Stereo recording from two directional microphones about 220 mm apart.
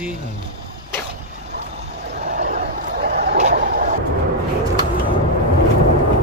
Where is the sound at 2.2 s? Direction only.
35° right (ahead or behind).